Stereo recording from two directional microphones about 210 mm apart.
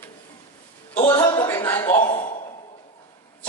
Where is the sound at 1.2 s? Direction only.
20° left (ahead or behind).